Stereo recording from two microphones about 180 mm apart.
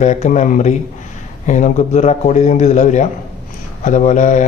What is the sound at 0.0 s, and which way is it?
A man's voice, 40° left (ahead or behind).